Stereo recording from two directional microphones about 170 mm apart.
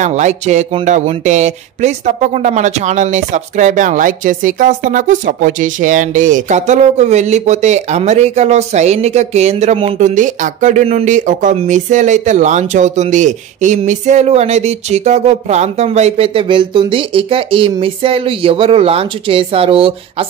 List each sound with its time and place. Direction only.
0.0 s speech: 45° right (ahead or behind)
9.9 s speech: 45° right (ahead or behind)